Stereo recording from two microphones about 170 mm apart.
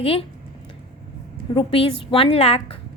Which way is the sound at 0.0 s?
35° left (ahead or behind).